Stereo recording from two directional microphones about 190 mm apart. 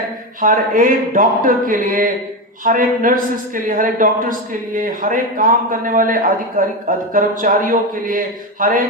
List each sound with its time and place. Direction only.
0.4 s speech: 45° right (ahead or behind)